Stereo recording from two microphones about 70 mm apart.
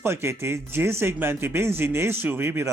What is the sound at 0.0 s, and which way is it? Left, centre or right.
Speech, right.